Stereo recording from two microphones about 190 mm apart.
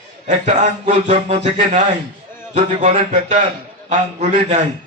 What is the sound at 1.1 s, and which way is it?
A man's voice, 30° right (ahead or behind).